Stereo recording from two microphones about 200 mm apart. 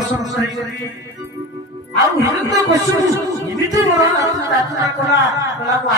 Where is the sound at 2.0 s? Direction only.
15° right (ahead or behind).